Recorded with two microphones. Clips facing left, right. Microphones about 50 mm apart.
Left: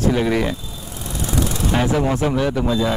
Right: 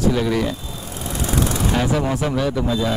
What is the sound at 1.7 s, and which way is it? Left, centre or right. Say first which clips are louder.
A man's voice: left 4 dB; centre.